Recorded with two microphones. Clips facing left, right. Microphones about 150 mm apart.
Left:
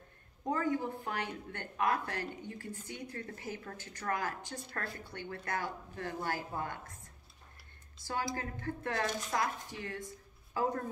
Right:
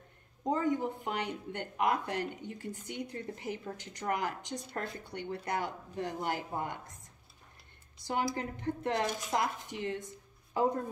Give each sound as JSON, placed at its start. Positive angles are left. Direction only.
{"t": 0.4, "sound": "speech", "side_deg": -20}
{"t": 8.0, "sound": "speech", "side_deg": -20}